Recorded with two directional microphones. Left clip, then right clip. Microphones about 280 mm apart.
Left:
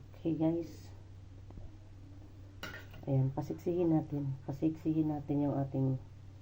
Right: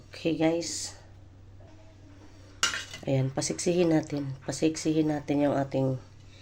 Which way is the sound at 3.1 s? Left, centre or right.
Right.